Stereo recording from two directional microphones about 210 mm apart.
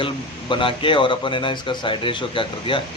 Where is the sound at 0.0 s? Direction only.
25° left (ahead or behind).